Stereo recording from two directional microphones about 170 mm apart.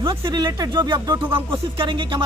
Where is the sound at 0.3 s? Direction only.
25° right (ahead or behind).